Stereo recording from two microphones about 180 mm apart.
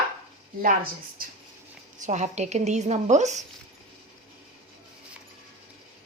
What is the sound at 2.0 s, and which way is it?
A woman's voice, 40° right (ahead or behind).